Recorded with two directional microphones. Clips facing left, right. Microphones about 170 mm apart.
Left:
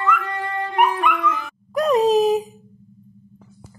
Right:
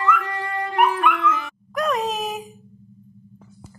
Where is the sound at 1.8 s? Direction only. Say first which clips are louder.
Left 8 dB; 35° left (ahead or behind).